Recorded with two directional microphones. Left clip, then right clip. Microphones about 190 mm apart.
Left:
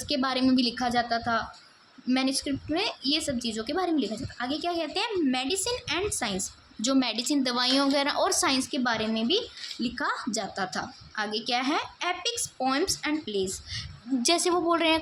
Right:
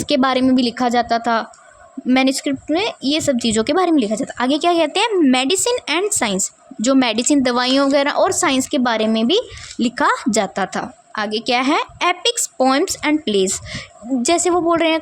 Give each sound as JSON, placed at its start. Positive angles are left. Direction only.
{"t": 0.0, "sound": "a woman's voice", "side_deg": -50}
{"t": 14.3, "sound": "a woman's voice", "side_deg": -35}